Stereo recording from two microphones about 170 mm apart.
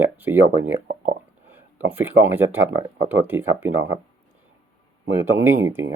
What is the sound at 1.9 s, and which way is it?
Speech, 10° right (ahead or behind).